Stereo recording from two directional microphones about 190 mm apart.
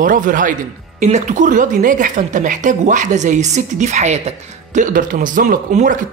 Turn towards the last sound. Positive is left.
turn(degrees=-40)  # may be behind; listen again after turning